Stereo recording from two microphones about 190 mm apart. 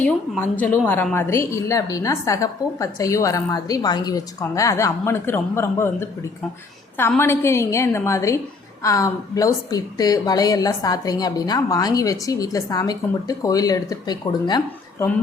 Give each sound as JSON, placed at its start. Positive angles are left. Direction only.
{"t": 0.0, "sound": "a woman's voice", "side_deg": 10}